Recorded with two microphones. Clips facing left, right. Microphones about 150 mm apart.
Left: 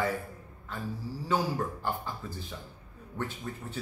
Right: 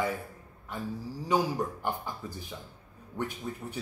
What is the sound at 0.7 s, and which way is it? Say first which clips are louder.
Speech: right 1 dB; 15° right (ahead or behind).